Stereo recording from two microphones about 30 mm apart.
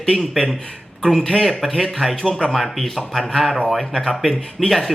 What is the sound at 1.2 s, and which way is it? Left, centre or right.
Speech, left.